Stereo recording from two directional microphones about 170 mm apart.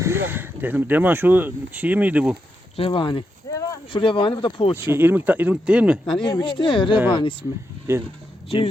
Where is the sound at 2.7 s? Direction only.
30° left (ahead or behind).